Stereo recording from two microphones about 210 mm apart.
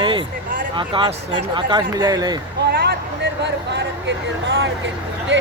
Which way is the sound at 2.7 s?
50° right (ahead or behind).